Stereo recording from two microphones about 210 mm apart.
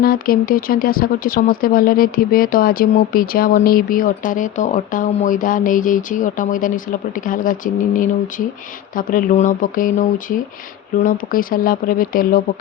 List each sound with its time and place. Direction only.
0.0 s speech: 45° left (ahead or behind)